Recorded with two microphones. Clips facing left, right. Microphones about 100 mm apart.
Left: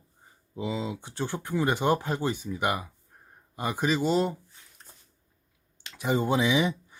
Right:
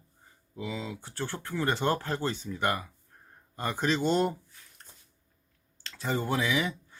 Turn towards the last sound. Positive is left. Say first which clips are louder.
# left 4 dB
turn(degrees=20)  # may be behind; listen again after turning